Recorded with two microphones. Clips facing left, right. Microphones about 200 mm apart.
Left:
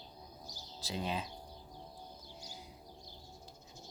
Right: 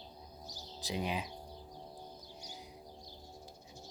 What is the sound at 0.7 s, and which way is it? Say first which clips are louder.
Speech: right 1 dB; 15° right (ahead or behind).